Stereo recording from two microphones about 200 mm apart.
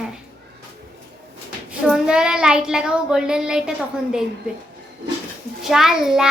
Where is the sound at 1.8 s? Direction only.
5° right (ahead or behind).